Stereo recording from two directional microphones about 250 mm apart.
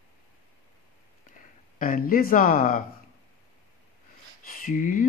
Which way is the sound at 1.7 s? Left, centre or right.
Left.